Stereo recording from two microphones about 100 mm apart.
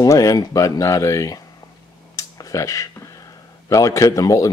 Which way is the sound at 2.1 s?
35° left (ahead or behind).